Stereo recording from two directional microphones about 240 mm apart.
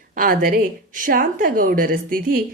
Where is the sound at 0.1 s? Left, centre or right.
Right.